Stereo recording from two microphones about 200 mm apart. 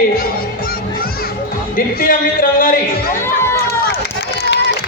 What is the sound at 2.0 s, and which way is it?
Music, 45° left (ahead or behind).